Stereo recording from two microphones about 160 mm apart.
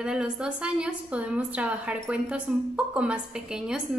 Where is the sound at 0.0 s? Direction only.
5° right (ahead or behind).